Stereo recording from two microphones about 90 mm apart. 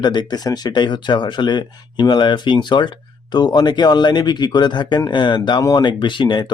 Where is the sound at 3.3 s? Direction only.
50° left (ahead or behind).